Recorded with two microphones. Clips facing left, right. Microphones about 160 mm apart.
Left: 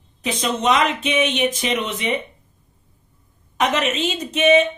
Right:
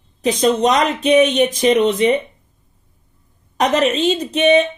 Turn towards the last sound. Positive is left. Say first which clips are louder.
# right 2 dB
turn(degrees=-35)  # may be behind; listen again after turning